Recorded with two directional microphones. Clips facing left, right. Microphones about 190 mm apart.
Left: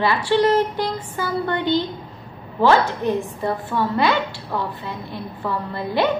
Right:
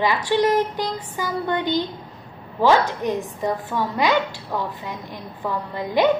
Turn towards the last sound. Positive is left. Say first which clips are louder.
# right 1 dB
turn(degrees=-15)  # may be behind; listen again after turning